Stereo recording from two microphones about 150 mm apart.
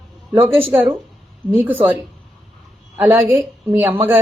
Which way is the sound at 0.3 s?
15° right (ahead or behind).